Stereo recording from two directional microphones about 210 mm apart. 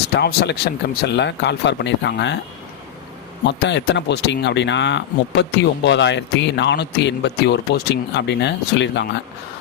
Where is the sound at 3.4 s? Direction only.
55° left (ahead or behind).